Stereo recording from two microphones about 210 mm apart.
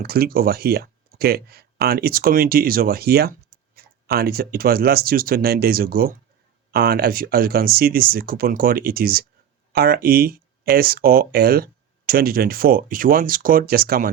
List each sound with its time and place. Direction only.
0.0 s speech: 45° right (ahead or behind)